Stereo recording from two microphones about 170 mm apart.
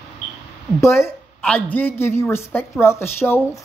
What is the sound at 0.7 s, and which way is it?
A woman's voice, 15° left (ahead or behind).